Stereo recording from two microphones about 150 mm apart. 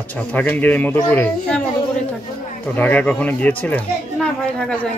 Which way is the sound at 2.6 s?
10° left (ahead or behind).